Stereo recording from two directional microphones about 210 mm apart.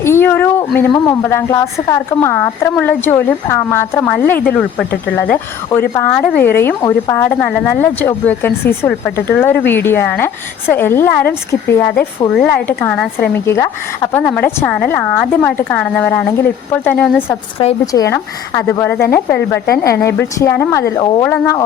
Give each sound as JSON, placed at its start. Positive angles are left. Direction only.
{"t": 0.0, "sound": "a sound", "side_deg": 10}
{"t": 0.8, "sound": "a woman's voice", "side_deg": 15}
{"t": 17.6, "sound": "speech", "side_deg": 25}
{"t": 17.9, "sound": "a woman's voice", "side_deg": 15}